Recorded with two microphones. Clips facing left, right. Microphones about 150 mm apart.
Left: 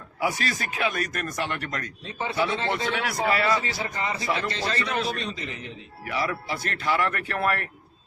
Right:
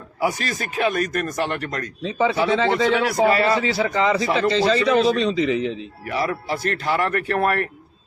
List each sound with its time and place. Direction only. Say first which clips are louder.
0.2 s speech: right 4 dB; 40° right (ahead or behind)
2.0 s speech: right 8 dB; 90° right
2.9 s speech: right 8 dB; 35° right (ahead or behind)
3.6 s speech: right 10 dB; 80° right
6.1 s speech: right 4 dB; 40° right (ahead or behind)